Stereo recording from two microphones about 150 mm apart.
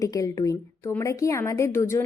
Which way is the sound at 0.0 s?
20° left (ahead or behind).